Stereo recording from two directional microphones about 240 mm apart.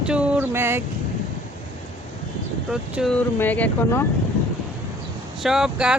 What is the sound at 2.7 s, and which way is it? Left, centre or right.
Speech, centre.